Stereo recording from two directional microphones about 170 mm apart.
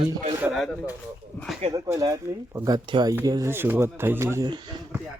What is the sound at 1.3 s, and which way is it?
Speech, 10° left (ahead or behind).